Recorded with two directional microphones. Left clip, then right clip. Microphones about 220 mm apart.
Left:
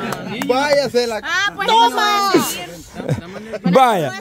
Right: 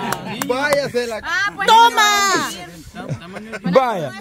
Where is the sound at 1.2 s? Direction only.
30° left (ahead or behind).